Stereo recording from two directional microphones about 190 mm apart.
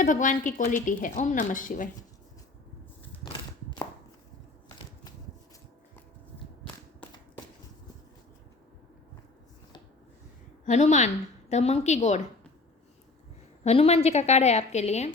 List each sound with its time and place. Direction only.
0.0 s a woman's voice: 45° left (ahead or behind)
10.7 s a woman's voice: 40° left (ahead or behind)
13.7 s a woman's voice: 35° left (ahead or behind)